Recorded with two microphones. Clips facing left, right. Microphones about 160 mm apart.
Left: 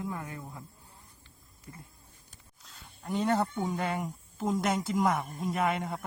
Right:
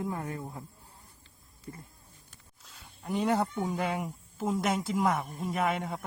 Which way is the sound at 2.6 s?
5° right (ahead or behind).